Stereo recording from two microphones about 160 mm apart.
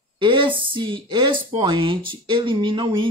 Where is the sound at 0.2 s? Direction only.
30° right (ahead or behind).